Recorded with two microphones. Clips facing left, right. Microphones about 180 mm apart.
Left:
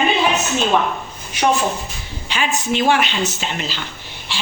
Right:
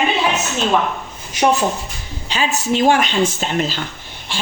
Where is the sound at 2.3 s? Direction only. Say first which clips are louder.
Right 2 dB; 40° right (ahead or behind).